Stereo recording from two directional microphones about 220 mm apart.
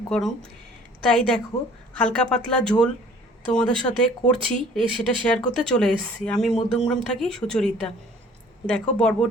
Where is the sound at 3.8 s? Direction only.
5° left (ahead or behind).